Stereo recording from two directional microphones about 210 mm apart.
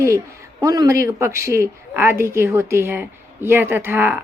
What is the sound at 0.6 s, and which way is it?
A woman's voice, 15° right (ahead or behind).